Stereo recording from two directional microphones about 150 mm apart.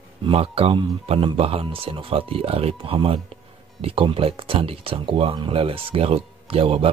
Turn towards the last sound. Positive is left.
turn(degrees=-40)  # may be behind; listen again after turning